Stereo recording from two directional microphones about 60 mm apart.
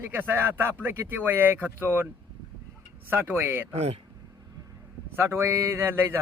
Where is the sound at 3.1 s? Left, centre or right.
Right.